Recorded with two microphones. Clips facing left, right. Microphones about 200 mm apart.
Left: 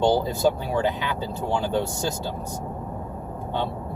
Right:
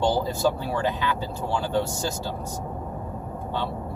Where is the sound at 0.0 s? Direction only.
20° left (ahead or behind).